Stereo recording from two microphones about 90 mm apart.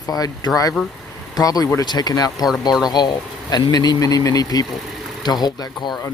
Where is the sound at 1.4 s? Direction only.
40° left (ahead or behind).